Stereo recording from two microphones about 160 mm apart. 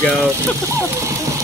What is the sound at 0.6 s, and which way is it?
Vehicle, 20° right (ahead or behind).